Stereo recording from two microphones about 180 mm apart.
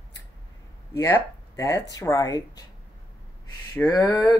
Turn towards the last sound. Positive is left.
turn(degrees=20)  # may be behind; listen again after turning